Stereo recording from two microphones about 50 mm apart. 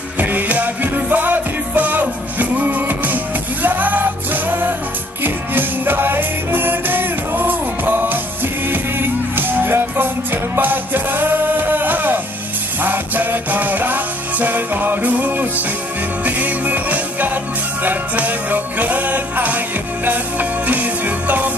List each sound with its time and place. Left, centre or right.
0.2 s music: right